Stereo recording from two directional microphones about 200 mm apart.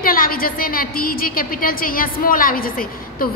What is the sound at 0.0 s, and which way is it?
A woman's voice, 45° left (ahead or behind).